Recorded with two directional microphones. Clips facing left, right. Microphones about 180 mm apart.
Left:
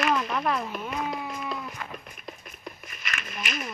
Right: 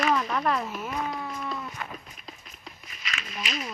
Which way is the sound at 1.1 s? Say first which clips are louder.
Left 1 dB; 15° left (ahead or behind).